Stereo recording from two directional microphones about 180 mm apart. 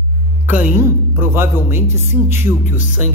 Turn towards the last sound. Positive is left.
turn(degrees=45)  # may be behind; listen again after turning